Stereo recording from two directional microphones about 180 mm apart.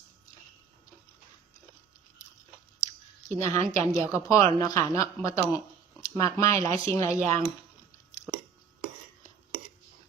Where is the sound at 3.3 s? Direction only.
40° right (ahead or behind).